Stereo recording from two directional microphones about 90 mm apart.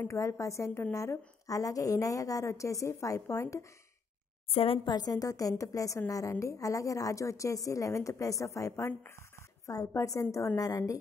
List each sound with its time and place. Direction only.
0.1 s a woman's voice: 35° left (ahead or behind)
4.5 s a woman's voice: 90° left
4.8 s a woman's voice: 50° left (ahead or behind)